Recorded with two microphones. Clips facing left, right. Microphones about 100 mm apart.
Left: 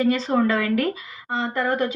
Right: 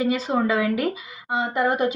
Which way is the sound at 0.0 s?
5° right (ahead or behind).